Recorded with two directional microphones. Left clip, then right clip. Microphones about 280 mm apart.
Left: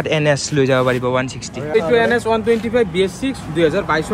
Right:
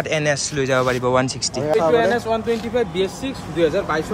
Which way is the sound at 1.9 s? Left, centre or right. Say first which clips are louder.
Left 5 dB; centre.